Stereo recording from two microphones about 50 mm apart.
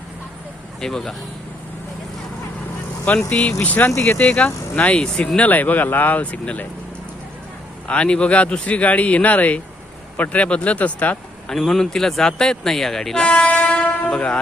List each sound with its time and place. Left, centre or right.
0.8 s speech: centre
3.2 s speech: left
4.9 s speech: left
5.4 s speech: left
7.9 s speech: left
11.4 s speech: centre
13.2 s train: left